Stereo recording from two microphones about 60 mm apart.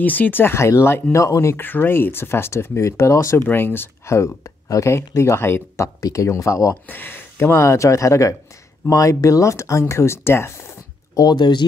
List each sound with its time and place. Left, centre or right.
0.0 s speech: left
0.6 s speech: left
1.1 s speech: left
1.6 s speech: left
3.4 s speech: left
4.1 s speech: left
5.9 s speech: left
6.9 s speech: left
11.2 s speech: left